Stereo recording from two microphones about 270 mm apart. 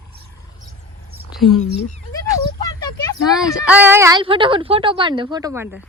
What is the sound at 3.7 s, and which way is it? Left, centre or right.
Speech, centre.